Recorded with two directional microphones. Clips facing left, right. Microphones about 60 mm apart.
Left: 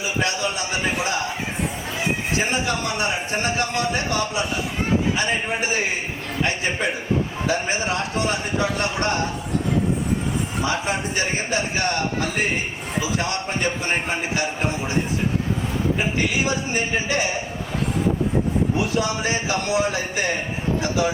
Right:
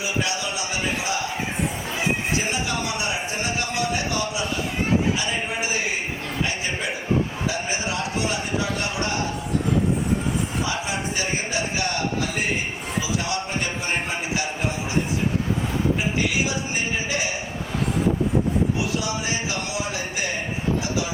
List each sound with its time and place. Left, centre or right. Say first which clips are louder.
7.4 s speech: left 4 dB; left
16.5 s speech: left 3 dB; left
18.9 s speech: left 4 dB; left